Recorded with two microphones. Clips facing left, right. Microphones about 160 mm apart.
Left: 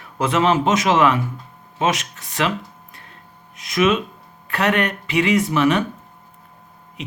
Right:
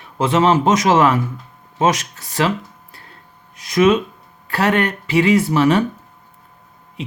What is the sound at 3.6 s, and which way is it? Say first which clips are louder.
Speech: right 4 dB; 35° right (ahead or behind).